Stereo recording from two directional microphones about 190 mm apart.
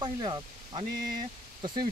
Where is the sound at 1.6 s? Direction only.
25° right (ahead or behind).